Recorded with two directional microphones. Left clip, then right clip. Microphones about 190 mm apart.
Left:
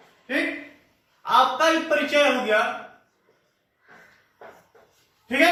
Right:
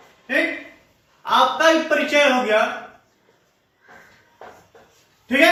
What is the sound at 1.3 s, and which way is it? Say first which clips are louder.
Speech: right 3 dB; 20° left (ahead or behind).